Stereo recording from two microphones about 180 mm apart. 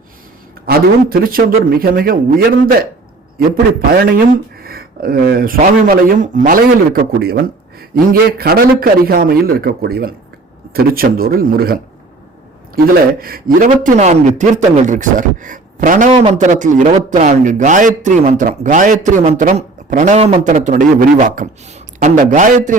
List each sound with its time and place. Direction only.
0.6 s speech: 55° right (ahead or behind)
3.3 s a man's voice: 55° right (ahead or behind)